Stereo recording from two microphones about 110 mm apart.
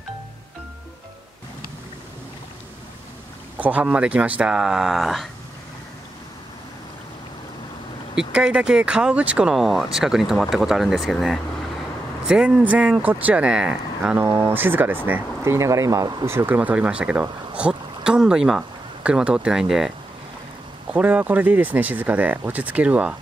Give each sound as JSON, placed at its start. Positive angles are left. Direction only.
{"t": 3.5, "sound": "speech", "side_deg": -15}
{"t": 8.2, "sound": "speech", "side_deg": -10}
{"t": 16.3, "sound": "speech", "side_deg": -20}
{"t": 20.9, "sound": "speech", "side_deg": -15}